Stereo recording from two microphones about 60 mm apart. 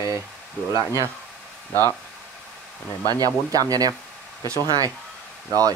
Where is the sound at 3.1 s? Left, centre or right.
Right.